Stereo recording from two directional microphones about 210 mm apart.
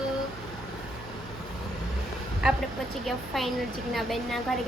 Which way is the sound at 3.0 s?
Centre (ahead or behind).